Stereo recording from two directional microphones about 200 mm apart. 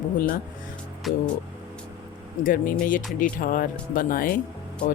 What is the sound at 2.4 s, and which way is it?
Speech, 45° left (ahead or behind).